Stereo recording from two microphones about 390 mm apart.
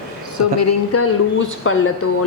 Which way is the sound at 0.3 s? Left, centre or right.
Left.